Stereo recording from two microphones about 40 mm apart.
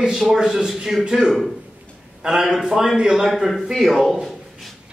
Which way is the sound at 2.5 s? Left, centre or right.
Centre.